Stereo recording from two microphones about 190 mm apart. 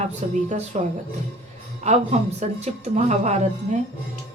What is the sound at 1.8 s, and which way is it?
Speech, 35° right (ahead or behind).